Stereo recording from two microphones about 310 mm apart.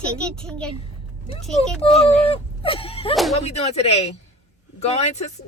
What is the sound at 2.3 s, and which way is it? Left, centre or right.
Whimper, centre.